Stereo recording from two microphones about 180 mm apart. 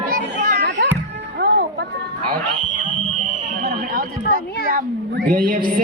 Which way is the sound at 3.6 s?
50° right (ahead or behind).